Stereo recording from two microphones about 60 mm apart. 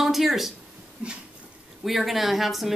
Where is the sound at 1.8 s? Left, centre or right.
Centre.